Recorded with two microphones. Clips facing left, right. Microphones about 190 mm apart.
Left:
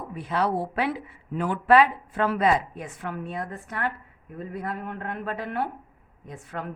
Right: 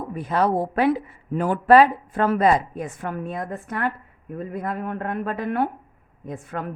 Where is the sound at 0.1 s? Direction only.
45° right (ahead or behind).